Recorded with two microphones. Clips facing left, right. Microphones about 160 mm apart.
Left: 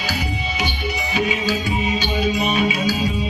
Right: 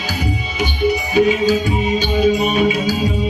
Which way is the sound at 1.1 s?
45° right (ahead or behind).